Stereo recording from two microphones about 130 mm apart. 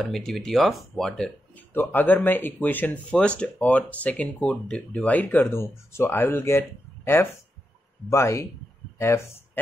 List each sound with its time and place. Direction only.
0.0 s speech: centre (ahead or behind)
1.7 s speech: 15° left (ahead or behind)
8.1 s speech: 20° left (ahead or behind)